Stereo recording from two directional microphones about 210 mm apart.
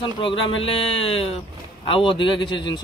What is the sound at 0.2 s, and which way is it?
Speech, 25° left (ahead or behind).